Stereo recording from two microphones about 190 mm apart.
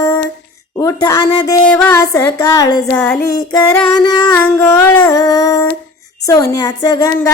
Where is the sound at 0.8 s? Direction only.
20° left (ahead or behind).